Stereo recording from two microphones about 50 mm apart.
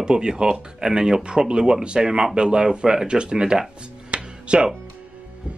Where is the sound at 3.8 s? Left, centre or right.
Right.